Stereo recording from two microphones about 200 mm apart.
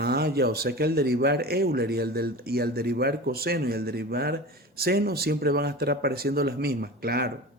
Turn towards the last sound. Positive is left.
turn(degrees=-50)  # may be behind; listen again after turning